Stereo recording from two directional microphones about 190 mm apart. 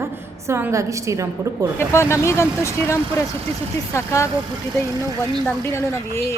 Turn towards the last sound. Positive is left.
turn(degrees=15)  # may be behind; listen again after turning